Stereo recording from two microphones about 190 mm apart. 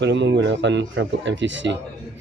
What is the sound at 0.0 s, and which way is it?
A man's voice, 70° right (ahead or behind).